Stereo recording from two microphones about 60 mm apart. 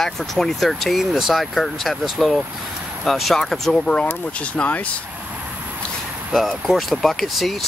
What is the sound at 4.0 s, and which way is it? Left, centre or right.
Speech, left.